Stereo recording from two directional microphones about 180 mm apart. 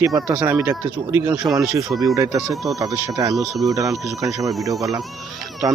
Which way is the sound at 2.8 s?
20° right (ahead or behind).